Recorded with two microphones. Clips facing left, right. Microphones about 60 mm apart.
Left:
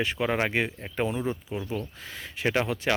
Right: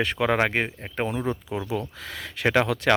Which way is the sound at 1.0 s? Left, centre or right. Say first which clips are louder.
Right 1 dB; right.